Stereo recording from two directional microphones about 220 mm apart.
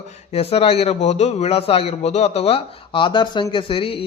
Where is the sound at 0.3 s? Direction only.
25° left (ahead or behind).